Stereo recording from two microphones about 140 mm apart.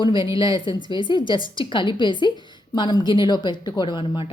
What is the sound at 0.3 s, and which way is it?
Speech, 35° left (ahead or behind).